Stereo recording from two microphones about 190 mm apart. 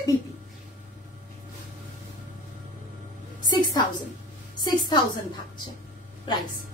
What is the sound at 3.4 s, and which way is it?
Music, 20° left (ahead or behind).